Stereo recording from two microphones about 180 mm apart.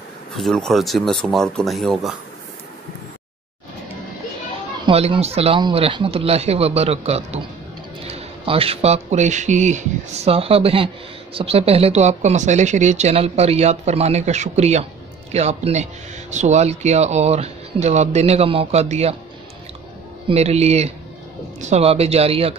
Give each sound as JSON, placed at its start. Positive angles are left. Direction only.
{"t": 0.4, "sound": "speech", "side_deg": 0}
{"t": 4.8, "sound": "speech", "side_deg": -30}
{"t": 20.2, "sound": "speech", "side_deg": -35}